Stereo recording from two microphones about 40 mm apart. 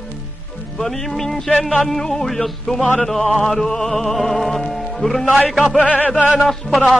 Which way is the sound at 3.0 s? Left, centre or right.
Centre.